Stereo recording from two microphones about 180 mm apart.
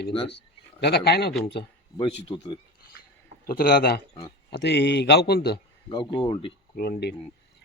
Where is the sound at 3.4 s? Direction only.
55° left (ahead or behind).